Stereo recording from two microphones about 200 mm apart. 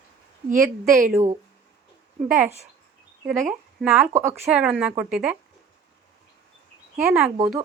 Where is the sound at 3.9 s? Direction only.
10° right (ahead or behind).